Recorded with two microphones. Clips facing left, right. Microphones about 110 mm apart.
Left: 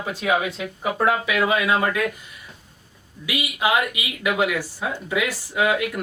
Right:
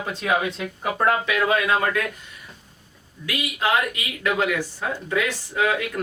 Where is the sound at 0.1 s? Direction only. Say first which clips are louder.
Left 1 dB; 5° left (ahead or behind).